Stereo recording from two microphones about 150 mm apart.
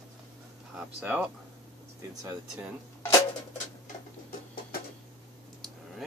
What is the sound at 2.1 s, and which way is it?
Speech, 20° right (ahead or behind).